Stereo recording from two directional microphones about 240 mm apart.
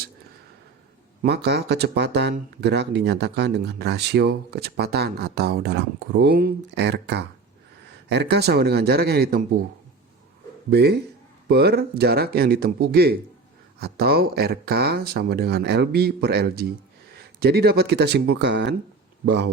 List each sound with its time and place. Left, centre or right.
1.2 s speech: right
10.7 s speech: right